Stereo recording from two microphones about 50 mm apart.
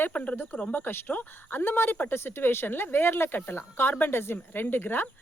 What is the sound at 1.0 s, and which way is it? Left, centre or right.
Speech, left.